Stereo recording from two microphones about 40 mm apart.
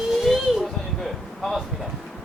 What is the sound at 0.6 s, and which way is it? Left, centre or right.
Heart sounds, centre.